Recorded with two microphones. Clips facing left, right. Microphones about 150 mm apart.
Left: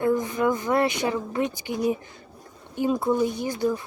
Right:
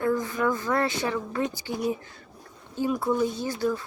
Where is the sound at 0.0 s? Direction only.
20° left (ahead or behind).